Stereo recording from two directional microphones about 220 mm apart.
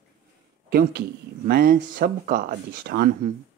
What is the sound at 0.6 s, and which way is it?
Speech, 45° right (ahead or behind).